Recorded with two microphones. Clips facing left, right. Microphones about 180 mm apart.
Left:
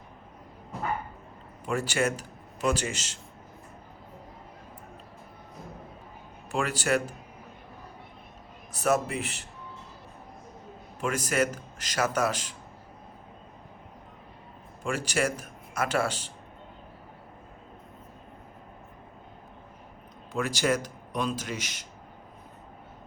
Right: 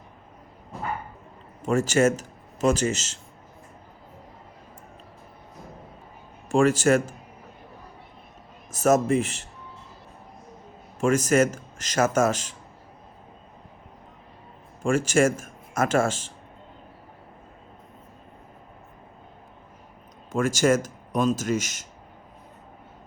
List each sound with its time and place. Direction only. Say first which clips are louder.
1.6 s a man's voice: right 7 dB; 45° right (ahead or behind)
6.5 s speech: right 8 dB; 45° right (ahead or behind)
8.7 s speech: right 6 dB; 45° right (ahead or behind)
11.0 s speech: right 7 dB; 45° right (ahead or behind)
14.8 s speech: right 8 dB; 45° right (ahead or behind)
20.3 s speech: right 6 dB; 45° right (ahead or behind)